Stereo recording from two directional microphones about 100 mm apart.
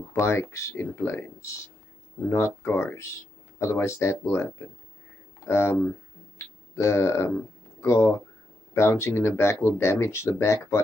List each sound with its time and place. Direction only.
0.1 s speech: 25° left (ahead or behind)
5.5 s speech: 25° left (ahead or behind)